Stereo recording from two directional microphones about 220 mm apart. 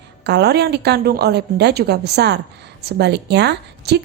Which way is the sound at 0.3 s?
50° right (ahead or behind).